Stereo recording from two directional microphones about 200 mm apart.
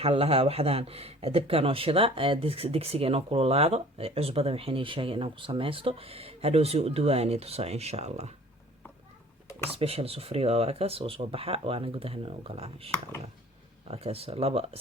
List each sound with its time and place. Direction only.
0.0 s speech: 30° right (ahead or behind)
9.6 s speech: 30° right (ahead or behind)